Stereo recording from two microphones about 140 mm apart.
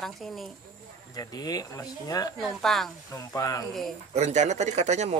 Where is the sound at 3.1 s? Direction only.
25° left (ahead or behind).